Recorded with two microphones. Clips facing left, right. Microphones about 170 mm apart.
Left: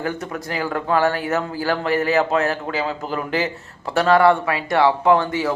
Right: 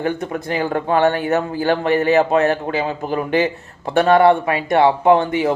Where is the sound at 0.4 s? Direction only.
25° right (ahead or behind).